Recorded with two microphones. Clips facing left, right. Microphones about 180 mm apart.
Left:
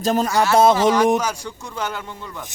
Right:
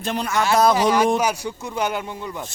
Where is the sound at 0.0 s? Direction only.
40° left (ahead or behind).